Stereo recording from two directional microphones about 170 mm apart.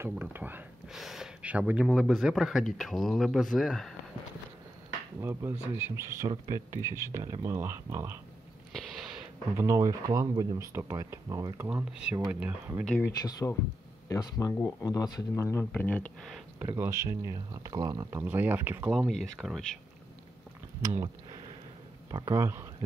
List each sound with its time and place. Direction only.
0.0 s speech: 10° right (ahead or behind)
5.2 s speech: 15° right (ahead or behind)
9.6 s speech: 20° right (ahead or behind)
13.0 s speech: 20° left (ahead or behind)
16.5 s speech: 15° right (ahead or behind)
22.1 s speech: 20° right (ahead or behind)